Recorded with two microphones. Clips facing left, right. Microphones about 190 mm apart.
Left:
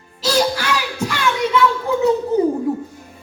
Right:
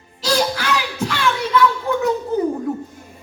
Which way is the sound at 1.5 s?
25° left (ahead or behind).